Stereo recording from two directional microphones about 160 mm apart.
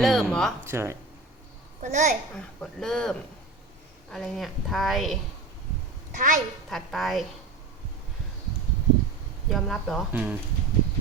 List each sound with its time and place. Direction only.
0.0 s speech: centre (ahead or behind)
0.6 s speech: 15° right (ahead or behind)
1.8 s a child's voice: 50° right (ahead or behind)
2.6 s speech: 5° left (ahead or behind)
6.1 s a child's voice: 55° right (ahead or behind)
6.7 s speech: centre (ahead or behind)
9.5 s speech: centre (ahead or behind)
10.1 s speech: 10° right (ahead or behind)